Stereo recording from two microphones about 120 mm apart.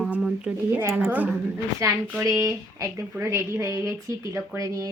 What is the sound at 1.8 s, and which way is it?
Speech, 25° right (ahead or behind).